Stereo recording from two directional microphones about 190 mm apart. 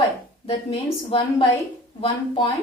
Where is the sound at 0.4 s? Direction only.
30° left (ahead or behind).